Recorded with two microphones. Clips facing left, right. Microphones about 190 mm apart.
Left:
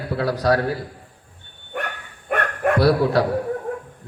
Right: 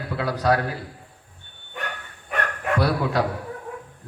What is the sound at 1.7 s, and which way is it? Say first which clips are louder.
Bow-wow: left 5 dB; 55° left (ahead or behind).